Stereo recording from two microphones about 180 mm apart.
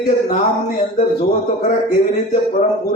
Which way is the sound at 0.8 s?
40° left (ahead or behind).